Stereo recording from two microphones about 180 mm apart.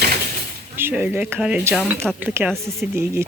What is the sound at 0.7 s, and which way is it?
Speech, 10° right (ahead or behind).